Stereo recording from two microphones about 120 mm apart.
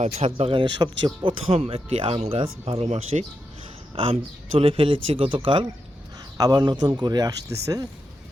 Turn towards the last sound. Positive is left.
turn(degrees=-30)  # may be behind; listen again after turning